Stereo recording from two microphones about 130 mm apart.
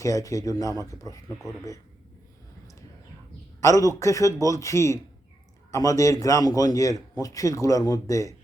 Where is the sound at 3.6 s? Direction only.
25° left (ahead or behind).